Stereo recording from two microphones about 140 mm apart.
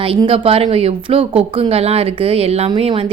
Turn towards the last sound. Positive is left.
turn(degrees=-45)  # may be behind; listen again after turning